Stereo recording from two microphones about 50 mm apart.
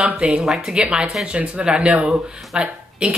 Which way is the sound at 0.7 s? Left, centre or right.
Right.